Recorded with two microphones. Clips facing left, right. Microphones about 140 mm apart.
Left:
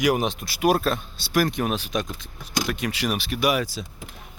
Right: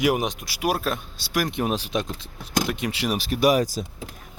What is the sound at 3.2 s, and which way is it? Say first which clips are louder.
Speech: right 6 dB; 40° right (ahead or behind).